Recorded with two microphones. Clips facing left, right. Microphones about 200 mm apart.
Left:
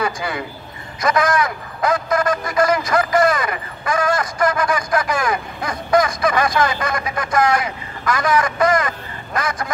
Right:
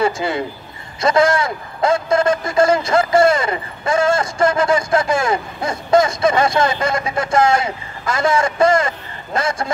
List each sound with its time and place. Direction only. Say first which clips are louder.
0.0 s a man's voice: right 5 dB; 25° right (ahead or behind)